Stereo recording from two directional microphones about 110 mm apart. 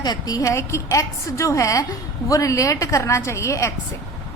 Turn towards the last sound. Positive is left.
turn(degrees=25)  # may be behind; listen again after turning